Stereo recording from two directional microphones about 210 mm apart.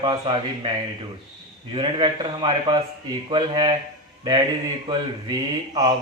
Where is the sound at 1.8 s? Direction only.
20° right (ahead or behind).